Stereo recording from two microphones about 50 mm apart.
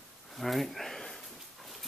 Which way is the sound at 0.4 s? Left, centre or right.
Centre.